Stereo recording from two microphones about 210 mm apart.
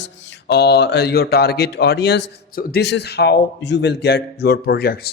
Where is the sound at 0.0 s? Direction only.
50° left (ahead or behind).